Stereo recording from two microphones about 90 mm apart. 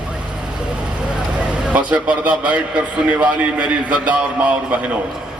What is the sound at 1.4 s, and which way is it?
A man's voice, 15° right (ahead or behind).